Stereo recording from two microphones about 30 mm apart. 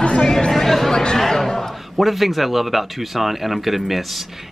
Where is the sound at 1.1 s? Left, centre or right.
Centre.